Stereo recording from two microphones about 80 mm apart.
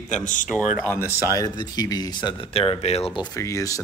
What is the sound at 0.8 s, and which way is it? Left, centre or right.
Speech, left.